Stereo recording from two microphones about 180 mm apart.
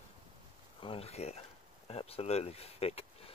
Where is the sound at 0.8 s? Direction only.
30° left (ahead or behind).